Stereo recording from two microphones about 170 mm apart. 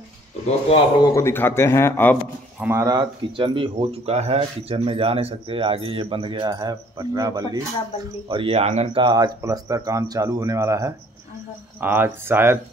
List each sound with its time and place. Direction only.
0.7 s a man's voice: 30° left (ahead or behind)
1.1 s speech: 15° left (ahead or behind)
2.6 s speech: 15° right (ahead or behind)